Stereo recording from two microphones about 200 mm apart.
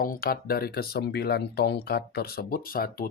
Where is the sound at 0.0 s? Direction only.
45° left (ahead or behind).